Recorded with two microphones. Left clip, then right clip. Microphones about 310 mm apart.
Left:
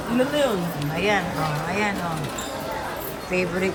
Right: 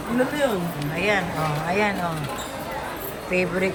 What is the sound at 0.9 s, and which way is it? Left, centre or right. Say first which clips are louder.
Speech: even; centre.